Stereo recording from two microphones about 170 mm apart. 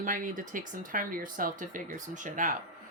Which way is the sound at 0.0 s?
50° right (ahead or behind).